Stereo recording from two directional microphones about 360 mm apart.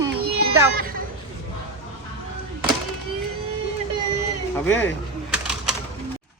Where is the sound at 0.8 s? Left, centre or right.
Right.